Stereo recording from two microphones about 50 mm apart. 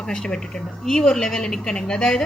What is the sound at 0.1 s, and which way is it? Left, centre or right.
A woman's voice, centre.